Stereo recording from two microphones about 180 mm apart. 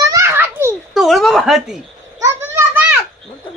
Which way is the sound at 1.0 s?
Centre (ahead or behind).